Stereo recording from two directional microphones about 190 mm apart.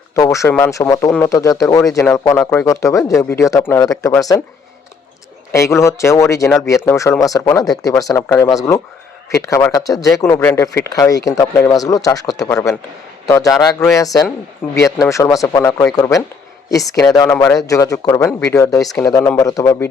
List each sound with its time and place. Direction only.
0.2 s speech: 15° left (ahead or behind)
5.5 s speech: 15° left (ahead or behind)